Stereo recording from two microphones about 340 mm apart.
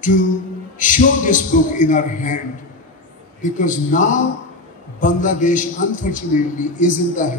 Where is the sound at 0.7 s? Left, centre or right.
Left.